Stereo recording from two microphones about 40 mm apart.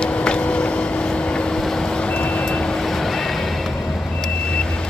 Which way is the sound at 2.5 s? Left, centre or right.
Centre.